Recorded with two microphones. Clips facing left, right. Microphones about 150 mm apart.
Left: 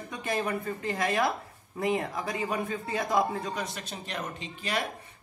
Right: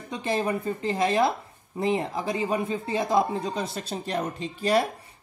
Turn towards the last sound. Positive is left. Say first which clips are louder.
# right 9 dB
turn(degrees=-35)  # may be behind; listen again after turning